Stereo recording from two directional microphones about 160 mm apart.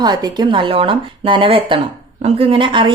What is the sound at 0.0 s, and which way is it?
Speech, 25° right (ahead or behind).